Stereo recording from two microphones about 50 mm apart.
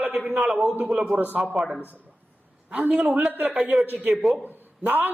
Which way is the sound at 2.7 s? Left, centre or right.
Right.